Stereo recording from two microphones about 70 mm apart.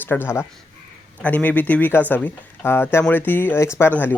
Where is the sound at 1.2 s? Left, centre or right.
Left.